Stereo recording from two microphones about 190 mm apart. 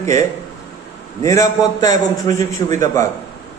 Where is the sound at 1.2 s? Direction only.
20° left (ahead or behind).